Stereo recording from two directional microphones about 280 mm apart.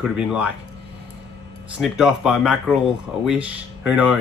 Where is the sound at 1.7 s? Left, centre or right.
Centre.